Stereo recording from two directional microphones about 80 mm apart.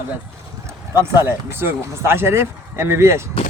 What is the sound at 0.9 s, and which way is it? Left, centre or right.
Speech, right.